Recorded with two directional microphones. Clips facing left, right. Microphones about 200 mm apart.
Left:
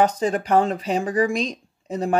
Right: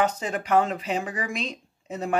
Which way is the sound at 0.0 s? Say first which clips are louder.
Left 6 dB; 35° left (ahead or behind).